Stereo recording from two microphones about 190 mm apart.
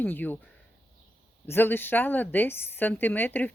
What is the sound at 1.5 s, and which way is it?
A woman's voice, 10° left (ahead or behind).